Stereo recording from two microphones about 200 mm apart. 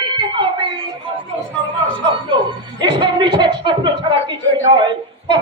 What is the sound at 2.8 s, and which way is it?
A man's voice, 25° right (ahead or behind).